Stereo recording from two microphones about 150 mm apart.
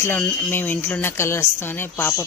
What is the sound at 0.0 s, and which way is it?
Speech, 15° left (ahead or behind).